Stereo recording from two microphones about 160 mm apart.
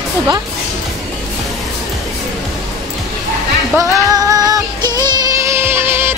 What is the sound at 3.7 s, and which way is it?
Music, 25° right (ahead or behind).